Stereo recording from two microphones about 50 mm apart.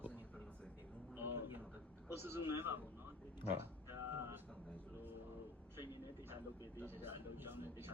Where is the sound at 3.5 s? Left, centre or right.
Right.